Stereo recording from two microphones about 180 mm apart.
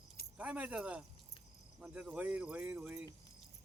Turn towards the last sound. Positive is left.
turn(degrees=-10)  # may be behind; listen again after turning